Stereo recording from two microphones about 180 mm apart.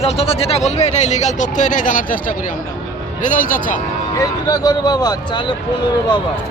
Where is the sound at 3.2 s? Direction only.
45° left (ahead or behind).